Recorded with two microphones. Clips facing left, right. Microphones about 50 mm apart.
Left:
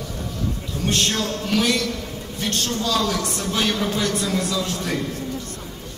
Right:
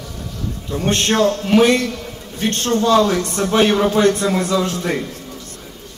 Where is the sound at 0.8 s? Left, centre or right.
Right.